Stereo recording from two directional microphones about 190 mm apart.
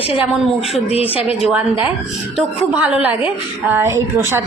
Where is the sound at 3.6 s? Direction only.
10° right (ahead or behind).